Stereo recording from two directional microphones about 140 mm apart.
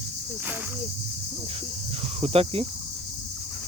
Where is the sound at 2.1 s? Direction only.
45° right (ahead or behind).